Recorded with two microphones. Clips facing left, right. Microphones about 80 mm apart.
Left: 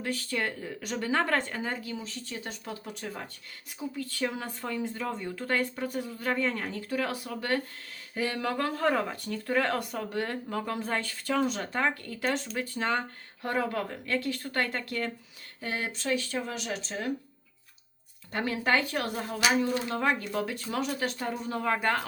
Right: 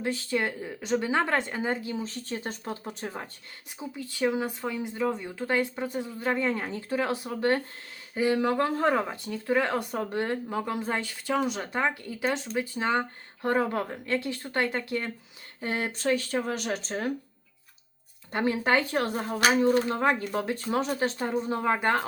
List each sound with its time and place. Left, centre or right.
0.0 s speech: right
2.0 s speech: right; by 9.8 s centre
9.9 s speech: right
13.4 s speech: right
15.6 s speech: right
18.3 s speech: right
19.4 s speech: right
19.9 s speech: right